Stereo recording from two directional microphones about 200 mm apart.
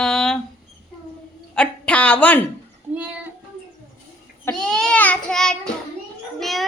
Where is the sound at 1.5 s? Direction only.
5° left (ahead or behind).